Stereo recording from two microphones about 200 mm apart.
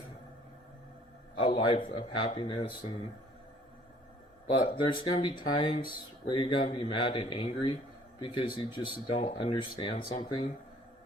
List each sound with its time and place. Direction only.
1.4 s speech: 25° left (ahead or behind)
4.5 s speech: 25° left (ahead or behind)